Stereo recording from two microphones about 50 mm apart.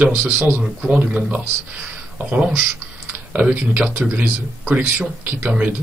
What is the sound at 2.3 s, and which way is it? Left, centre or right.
Speech, right.